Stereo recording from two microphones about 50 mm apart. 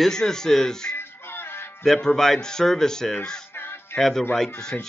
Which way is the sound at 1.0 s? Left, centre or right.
Left.